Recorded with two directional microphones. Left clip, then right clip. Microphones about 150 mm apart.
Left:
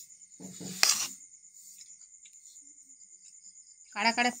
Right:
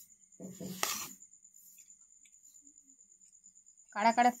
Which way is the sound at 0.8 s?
10° left (ahead or behind).